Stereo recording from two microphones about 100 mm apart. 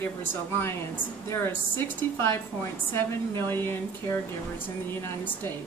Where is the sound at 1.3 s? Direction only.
25° left (ahead or behind).